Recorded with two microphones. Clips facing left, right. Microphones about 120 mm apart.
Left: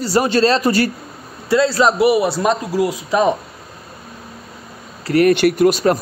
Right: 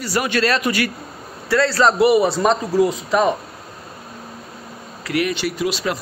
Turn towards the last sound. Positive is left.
turn(degrees=50)  # may be behind; listen again after turning